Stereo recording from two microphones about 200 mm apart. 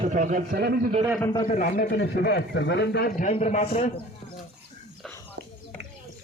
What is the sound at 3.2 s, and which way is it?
Speech, 35° left (ahead or behind).